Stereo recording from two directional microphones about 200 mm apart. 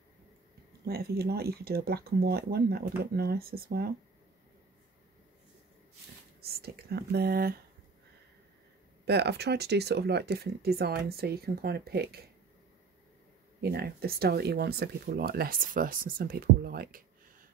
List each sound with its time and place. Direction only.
0.8 s speech: 50° right (ahead or behind)
6.4 s speech: 50° right (ahead or behind)
9.0 s speech: 55° right (ahead or behind)
13.6 s speech: 50° right (ahead or behind)